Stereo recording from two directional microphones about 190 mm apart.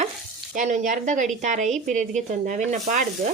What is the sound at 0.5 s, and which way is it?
Speech, 40° right (ahead or behind).